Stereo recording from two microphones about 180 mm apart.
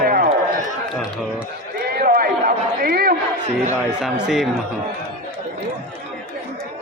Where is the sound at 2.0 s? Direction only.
55° right (ahead or behind).